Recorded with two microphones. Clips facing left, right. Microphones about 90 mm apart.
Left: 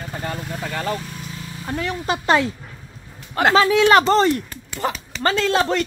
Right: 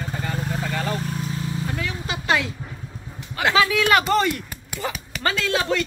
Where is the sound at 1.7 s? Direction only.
40° left (ahead or behind).